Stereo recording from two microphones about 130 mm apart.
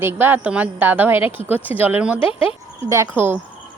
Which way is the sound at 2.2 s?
45° left (ahead or behind).